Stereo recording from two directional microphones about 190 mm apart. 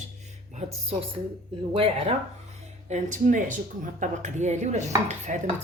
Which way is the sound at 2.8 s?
40° right (ahead or behind).